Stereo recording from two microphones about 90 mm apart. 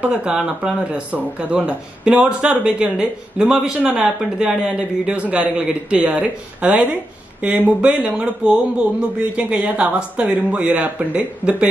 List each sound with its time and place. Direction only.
0.0 s speech: 15° right (ahead or behind)